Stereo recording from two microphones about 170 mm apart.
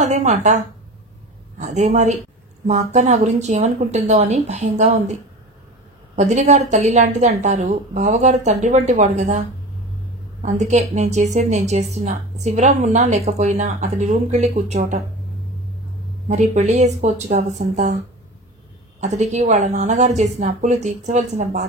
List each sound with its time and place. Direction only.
0.0 s a woman's voice: 40° right (ahead or behind)
6.1 s a woman's voice: 45° right (ahead or behind)
16.3 s a woman's voice: 45° right (ahead or behind)
18.9 s a woman's voice: 45° right (ahead or behind)